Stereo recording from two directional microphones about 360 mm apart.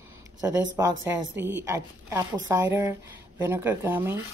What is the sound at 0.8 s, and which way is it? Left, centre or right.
Speech, centre.